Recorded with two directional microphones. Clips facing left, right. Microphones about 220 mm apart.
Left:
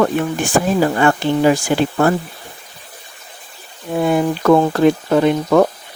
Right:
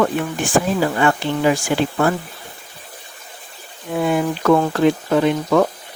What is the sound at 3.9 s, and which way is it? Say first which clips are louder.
Speech: left 3 dB; 35° left (ahead or behind).